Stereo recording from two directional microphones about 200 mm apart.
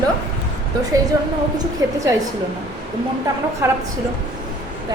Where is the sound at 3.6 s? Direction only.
15° right (ahead or behind).